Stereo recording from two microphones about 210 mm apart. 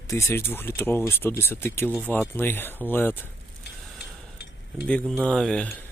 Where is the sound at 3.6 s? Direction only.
50° left (ahead or behind).